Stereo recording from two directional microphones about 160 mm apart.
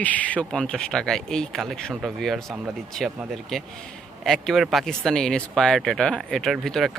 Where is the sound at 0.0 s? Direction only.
10° left (ahead or behind).